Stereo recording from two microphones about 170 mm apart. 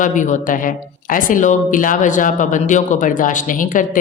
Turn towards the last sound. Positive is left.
turn(degrees=50)  # may be behind; listen again after turning